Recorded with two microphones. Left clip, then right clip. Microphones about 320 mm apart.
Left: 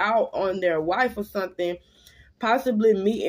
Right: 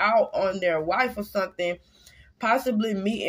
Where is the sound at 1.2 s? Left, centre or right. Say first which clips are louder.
Right 1 dB; right.